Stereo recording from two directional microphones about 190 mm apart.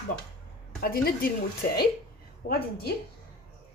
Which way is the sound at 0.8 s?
50° left (ahead or behind).